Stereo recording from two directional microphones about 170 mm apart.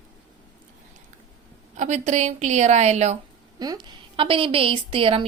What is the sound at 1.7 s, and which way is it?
A woman's voice, 45° right (ahead or behind).